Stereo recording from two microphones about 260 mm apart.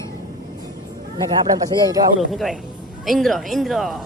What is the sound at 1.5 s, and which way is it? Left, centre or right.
Speech, centre.